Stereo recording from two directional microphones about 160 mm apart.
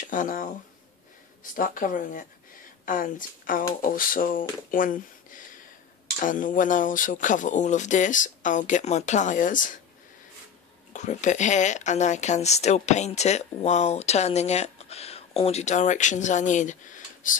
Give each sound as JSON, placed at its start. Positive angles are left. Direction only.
{"t": 0.0, "sound": "speech", "side_deg": 55}
{"t": 10.9, "sound": "speech", "side_deg": 50}